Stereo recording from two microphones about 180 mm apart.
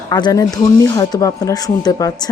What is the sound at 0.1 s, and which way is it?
A woman's voice, 20° left (ahead or behind).